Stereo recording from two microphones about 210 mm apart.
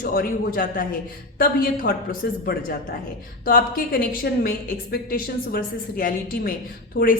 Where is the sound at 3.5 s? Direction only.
40° left (ahead or behind).